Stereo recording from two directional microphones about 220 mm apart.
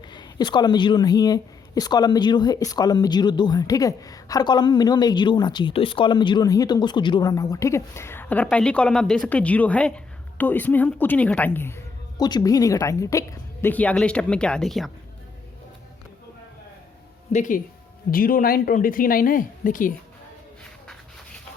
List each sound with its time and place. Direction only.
0.0 s speech: 20° left (ahead or behind); by 14.8 s centre (ahead or behind)
17.3 s speech: 35° left (ahead or behind)